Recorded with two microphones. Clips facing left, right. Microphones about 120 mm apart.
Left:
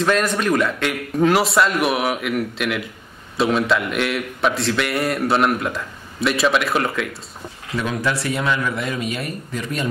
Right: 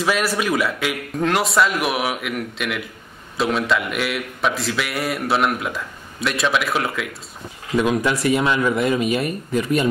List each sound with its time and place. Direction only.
0.0 s a man's voice: 5° right (ahead or behind)
7.7 s speech: 15° right (ahead or behind)